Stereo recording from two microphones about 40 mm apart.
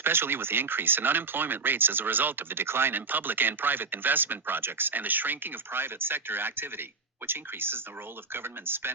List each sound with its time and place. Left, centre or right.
0.0 s speech: right